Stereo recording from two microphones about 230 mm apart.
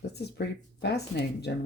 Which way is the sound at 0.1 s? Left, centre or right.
Left.